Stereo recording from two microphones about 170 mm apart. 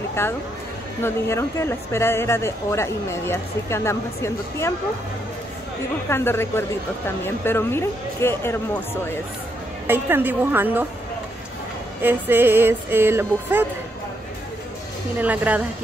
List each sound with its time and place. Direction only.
0.2 s speech: 15° left (ahead or behind)
6.0 s speech: 15° left (ahead or behind)
9.8 s speech: 10° right (ahead or behind)
12.0 s speech: 10° right (ahead or behind)
15.1 s speech: 10° right (ahead or behind)